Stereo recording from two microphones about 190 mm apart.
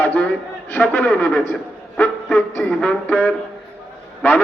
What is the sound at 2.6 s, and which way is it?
Speech, 5° left (ahead or behind).